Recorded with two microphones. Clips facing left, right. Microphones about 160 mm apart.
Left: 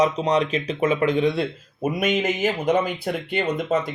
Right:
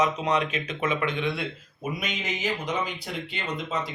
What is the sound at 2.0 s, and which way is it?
Speech, 50° left (ahead or behind).